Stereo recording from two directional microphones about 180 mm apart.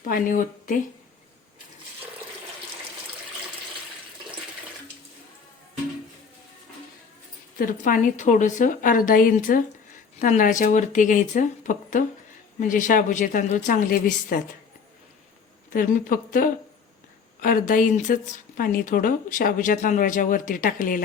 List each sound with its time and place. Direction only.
0.1 s speech: 50° left (ahead or behind)
7.6 s speech: 50° left (ahead or behind)
15.7 s speech: 50° left (ahead or behind)